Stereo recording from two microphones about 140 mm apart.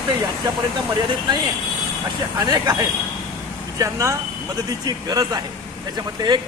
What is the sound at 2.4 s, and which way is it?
Speech, 25° right (ahead or behind).